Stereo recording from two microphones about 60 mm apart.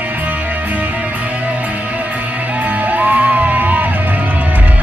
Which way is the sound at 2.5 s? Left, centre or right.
Right.